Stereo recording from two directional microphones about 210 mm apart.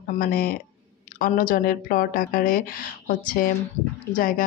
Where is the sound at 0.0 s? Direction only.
45° left (ahead or behind).